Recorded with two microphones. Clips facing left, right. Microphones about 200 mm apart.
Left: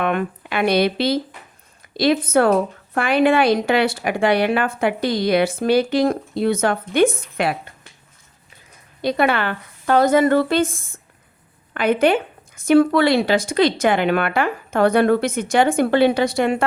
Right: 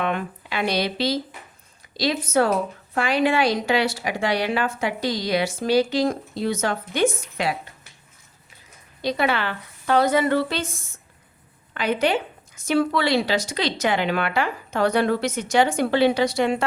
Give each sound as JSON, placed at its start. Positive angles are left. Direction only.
{"t": 0.0, "sound": "a woman's voice", "side_deg": 55}
{"t": 9.0, "sound": "speech", "side_deg": 55}